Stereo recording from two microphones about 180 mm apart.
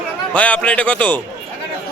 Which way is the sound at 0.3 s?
5° left (ahead or behind).